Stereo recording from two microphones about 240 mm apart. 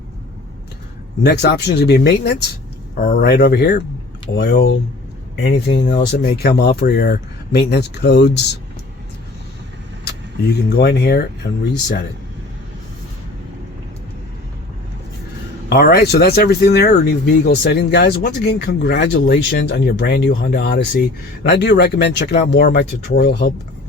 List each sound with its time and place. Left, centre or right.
1.2 s speech: left
10.8 s speech: left
15.7 s speech: left